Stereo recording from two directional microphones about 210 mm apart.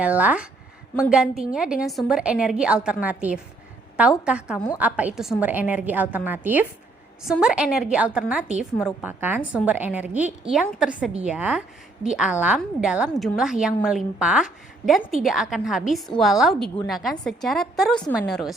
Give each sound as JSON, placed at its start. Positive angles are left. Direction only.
{"t": 0.0, "sound": "a woman's voice", "side_deg": -5}